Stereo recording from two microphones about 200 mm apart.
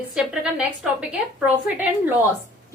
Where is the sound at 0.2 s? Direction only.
5° right (ahead or behind).